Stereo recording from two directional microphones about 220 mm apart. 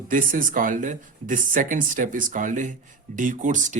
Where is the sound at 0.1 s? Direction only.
40° right (ahead or behind).